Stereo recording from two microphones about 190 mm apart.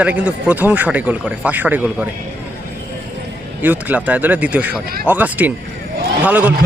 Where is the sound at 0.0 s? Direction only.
5° right (ahead or behind).